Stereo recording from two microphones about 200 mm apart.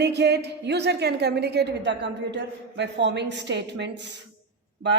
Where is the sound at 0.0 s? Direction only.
55° right (ahead or behind).